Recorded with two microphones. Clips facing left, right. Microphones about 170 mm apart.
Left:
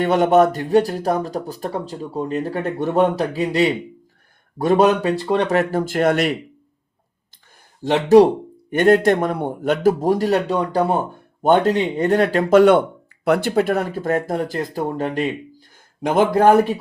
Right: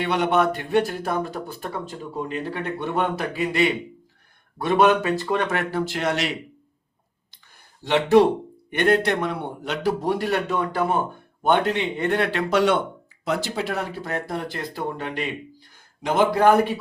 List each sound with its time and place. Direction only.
0.0 s speech: 45° left (ahead or behind)
7.9 s speech: 40° left (ahead or behind)